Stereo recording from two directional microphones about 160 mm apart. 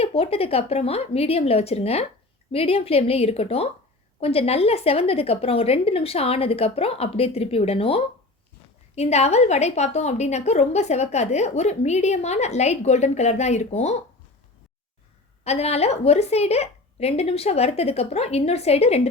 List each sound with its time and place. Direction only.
0.0 s a woman's voice: 40° left (ahead or behind)
15.4 s a woman's voice: 40° left (ahead or behind)